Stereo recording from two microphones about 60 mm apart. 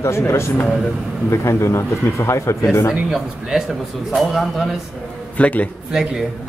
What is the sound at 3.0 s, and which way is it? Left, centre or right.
Speech, centre.